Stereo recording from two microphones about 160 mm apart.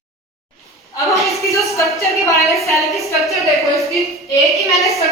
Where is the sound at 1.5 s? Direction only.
20° left (ahead or behind).